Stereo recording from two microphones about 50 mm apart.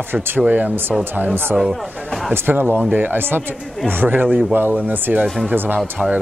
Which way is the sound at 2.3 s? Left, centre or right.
Right.